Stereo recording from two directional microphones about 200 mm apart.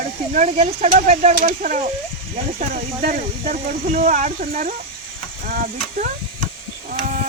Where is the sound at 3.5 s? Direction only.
35° right (ahead or behind).